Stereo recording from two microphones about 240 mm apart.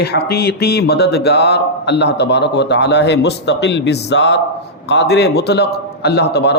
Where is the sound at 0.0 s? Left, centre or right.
Left.